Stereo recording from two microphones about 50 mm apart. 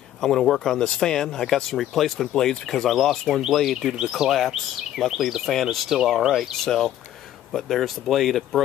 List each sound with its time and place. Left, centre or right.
0.2 s speech: centre
6.2 s speech: centre
6.6 s speech: centre